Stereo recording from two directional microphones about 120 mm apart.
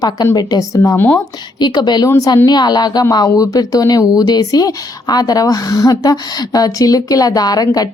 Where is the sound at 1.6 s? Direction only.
35° left (ahead or behind).